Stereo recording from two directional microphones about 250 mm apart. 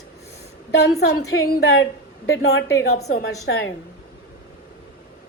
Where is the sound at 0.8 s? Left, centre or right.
Left.